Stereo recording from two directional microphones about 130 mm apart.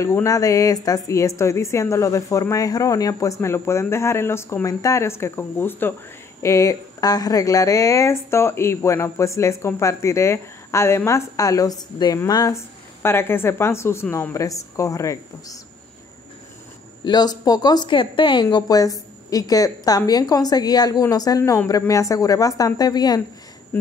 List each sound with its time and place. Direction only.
0.0 s speech: 25° left (ahead or behind)
17.0 s speech: 30° left (ahead or behind)
23.7 s speech: 15° left (ahead or behind)